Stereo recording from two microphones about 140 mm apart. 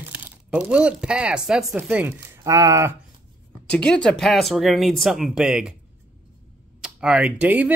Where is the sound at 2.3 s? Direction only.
25° right (ahead or behind).